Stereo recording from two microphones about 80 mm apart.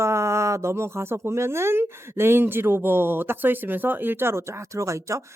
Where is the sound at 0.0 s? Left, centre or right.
Right.